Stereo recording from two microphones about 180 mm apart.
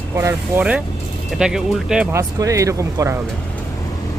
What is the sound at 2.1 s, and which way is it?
Speech, 15° right (ahead or behind).